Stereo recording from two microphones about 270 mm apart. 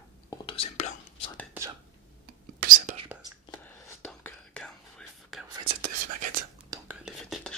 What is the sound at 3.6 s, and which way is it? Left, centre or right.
Whispering, centre.